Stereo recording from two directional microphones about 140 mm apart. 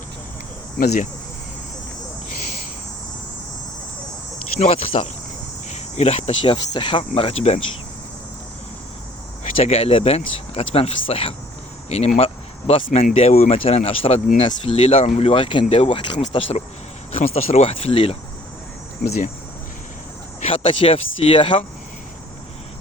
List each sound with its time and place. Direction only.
4.6 s speech: 45° left (ahead or behind)
9.4 s speech: 50° left (ahead or behind)
20.4 s speech: 45° left (ahead or behind)